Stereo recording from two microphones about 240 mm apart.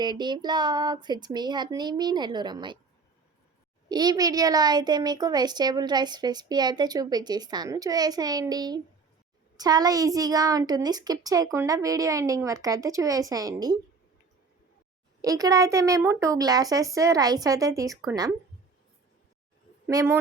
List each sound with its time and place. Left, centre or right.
0.0 s speech: centre
3.8 s speech: centre
15.2 s speech: centre
19.9 s speech: centre